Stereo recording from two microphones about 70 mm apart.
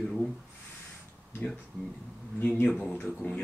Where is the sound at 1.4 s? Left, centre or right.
Centre.